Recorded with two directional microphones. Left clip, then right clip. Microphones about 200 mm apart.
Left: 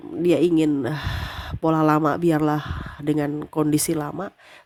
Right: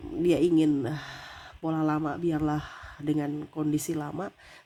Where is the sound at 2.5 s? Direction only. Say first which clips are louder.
Left 7 dB; 15° left (ahead or behind).